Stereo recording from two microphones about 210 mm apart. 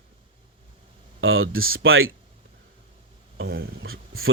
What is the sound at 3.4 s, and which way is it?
Speech, 60° right (ahead or behind).